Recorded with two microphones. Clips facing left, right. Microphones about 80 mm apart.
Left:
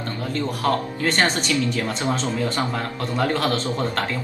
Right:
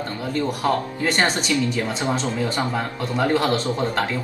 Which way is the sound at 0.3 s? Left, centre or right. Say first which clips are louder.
Right 1 dB; centre.